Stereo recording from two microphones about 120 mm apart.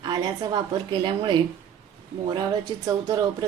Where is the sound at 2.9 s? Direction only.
30° right (ahead or behind).